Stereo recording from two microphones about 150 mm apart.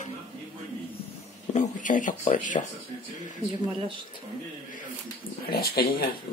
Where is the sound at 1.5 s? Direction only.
55° left (ahead or behind).